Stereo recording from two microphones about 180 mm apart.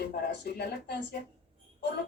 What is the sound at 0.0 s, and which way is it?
Speech, 60° left (ahead or behind).